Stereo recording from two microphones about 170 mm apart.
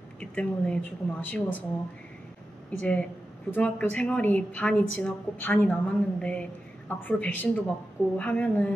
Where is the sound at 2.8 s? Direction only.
10° left (ahead or behind).